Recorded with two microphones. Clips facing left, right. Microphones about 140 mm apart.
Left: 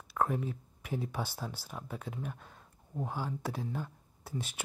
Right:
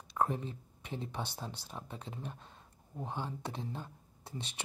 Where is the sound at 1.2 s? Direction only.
20° right (ahead or behind).